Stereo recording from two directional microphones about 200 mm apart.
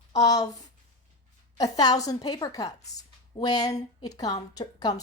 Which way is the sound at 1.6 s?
20° left (ahead or behind).